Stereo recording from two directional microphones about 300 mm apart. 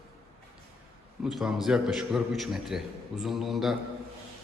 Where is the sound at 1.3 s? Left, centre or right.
Centre.